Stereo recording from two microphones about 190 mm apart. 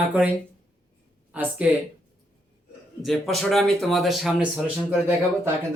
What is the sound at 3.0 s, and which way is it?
Speech, centre (ahead or behind).